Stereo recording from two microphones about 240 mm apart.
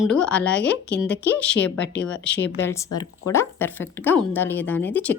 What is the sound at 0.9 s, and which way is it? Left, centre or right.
Speech, left.